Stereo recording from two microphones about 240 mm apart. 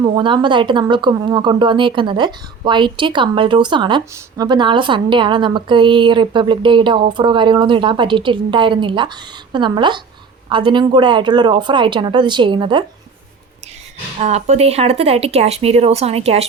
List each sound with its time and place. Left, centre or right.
0.0 s speech: centre
14.2 s speech: right